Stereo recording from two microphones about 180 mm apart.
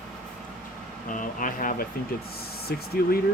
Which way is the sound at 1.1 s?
45° left (ahead or behind).